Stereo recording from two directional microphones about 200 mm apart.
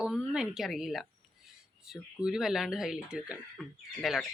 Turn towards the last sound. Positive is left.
turn(degrees=0)  # may be behind; listen again after turning